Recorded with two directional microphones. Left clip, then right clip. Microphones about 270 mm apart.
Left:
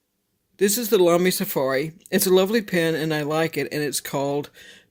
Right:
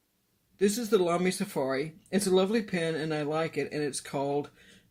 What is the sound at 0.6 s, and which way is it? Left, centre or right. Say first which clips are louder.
Speech: left 7 dB; left.